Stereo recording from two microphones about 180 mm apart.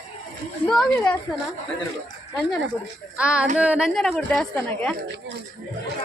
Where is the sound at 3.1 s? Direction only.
5° right (ahead or behind).